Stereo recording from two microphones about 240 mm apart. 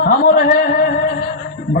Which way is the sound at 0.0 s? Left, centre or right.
Left.